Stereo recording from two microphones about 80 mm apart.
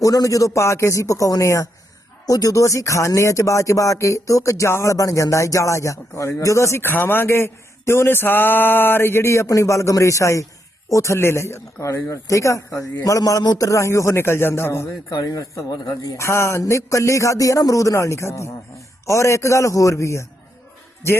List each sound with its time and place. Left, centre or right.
0.0 s speech: left
13.7 s speech: left
15.1 s speech: left